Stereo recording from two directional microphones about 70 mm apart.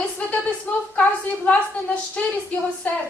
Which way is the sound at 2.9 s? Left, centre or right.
Left.